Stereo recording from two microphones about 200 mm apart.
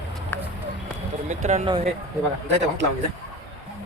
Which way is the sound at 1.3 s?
35° right (ahead or behind).